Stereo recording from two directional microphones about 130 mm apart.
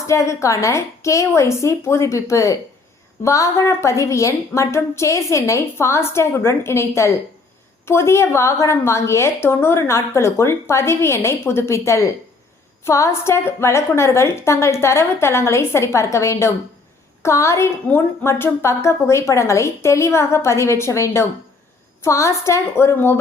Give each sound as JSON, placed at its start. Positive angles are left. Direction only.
{"t": 0.1, "sound": "a woman's voice", "side_deg": 20}